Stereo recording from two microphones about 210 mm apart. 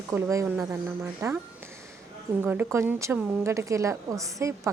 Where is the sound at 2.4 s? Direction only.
10° right (ahead or behind).